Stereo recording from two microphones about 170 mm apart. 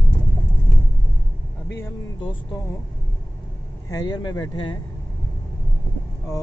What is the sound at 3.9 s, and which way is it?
Speech, 25° left (ahead or behind).